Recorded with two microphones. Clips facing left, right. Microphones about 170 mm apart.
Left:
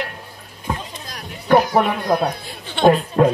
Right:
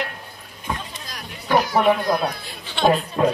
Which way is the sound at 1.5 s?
55° left (ahead or behind).